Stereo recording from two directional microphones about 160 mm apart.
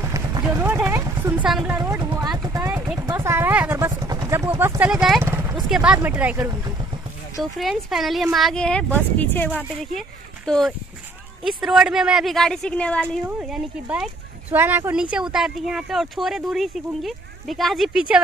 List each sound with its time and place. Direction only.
0.0 s a sound: 20° right (ahead or behind)
1.8 s vehicle: 20° right (ahead or behind)
3.0 s a sound: 20° right (ahead or behind); by 5.2 s 5° right (ahead or behind)
5.2 s vehicle: 15° right (ahead or behind)
5.7 s speech: 5° right (ahead or behind)
7.5 s speech: centre (ahead or behind)
13.4 s speech: 5° right (ahead or behind)